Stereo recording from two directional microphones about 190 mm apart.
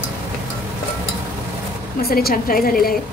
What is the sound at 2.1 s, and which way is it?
Speech, 50° left (ahead or behind).